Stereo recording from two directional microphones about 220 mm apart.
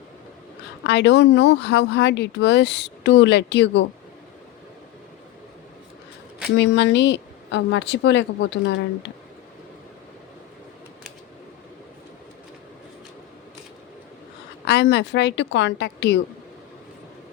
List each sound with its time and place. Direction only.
0.9 s speech: 50° left (ahead or behind)
6.6 s speech: 50° left (ahead or behind)
14.7 s speech: 50° left (ahead or behind)